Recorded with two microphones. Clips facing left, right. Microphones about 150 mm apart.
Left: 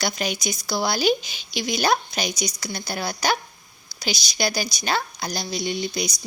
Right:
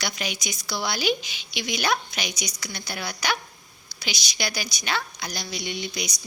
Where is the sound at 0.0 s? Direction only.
40° left (ahead or behind).